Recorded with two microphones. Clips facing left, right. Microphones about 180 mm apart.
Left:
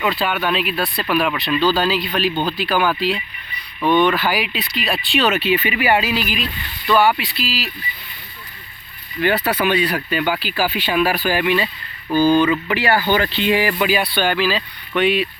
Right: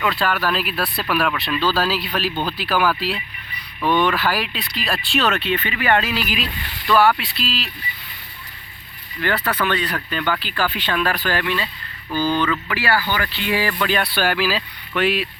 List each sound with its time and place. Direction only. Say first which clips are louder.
0.0 s speech: left 1 dB; centre (ahead or behind)
9.2 s speech: left 4 dB; 15° left (ahead or behind)
13.9 s speech: left 2 dB; centre (ahead or behind)